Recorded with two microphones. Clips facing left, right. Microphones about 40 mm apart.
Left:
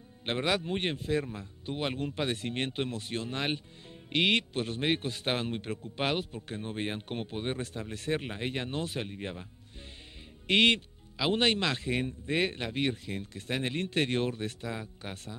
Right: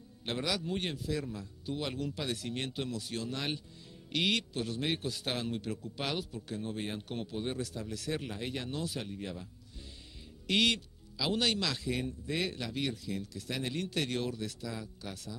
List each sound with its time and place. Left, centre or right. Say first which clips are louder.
0.2 s a man's voice: left 5 dB; left